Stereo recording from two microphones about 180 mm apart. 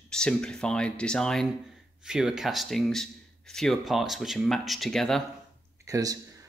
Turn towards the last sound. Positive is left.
turn(degrees=-20)  # may be behind; listen again after turning